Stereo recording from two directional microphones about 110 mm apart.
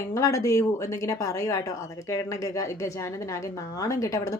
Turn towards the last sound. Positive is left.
turn(degrees=30)  # may be behind; listen again after turning